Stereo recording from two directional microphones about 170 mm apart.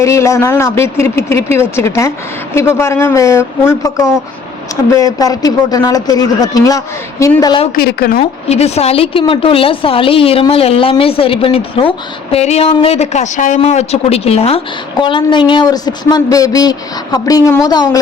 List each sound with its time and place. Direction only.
0.0 s speech: 15° left (ahead or behind)
7.8 s a woman's voice: 65° left (ahead or behind)
8.2 s speech: 40° left (ahead or behind); by 17.8 s 20° left (ahead or behind)